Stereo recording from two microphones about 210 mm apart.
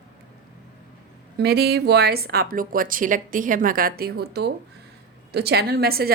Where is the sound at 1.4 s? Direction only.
50° right (ahead or behind).